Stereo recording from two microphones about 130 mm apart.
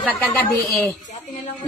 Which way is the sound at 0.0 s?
10° left (ahead or behind).